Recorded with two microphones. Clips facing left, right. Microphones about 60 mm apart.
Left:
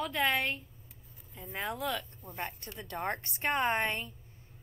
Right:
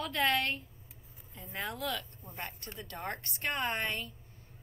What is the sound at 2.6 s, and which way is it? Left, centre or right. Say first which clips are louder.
Speech: left 5 dB; left.